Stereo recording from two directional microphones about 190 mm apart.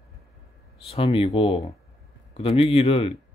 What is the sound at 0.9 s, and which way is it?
A man's voice, 30° left (ahead or behind).